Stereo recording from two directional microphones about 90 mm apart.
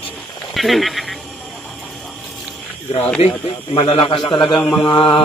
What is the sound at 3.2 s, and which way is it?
Speech, 90° left.